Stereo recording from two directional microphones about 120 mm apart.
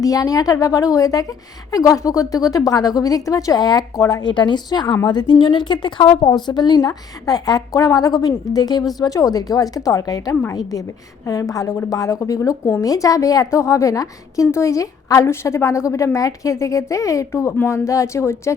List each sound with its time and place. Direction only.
0.0 s a woman's voice: 30° left (ahead or behind)